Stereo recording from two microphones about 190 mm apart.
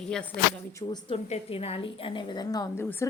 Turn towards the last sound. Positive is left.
turn(degrees=10)  # may be behind; listen again after turning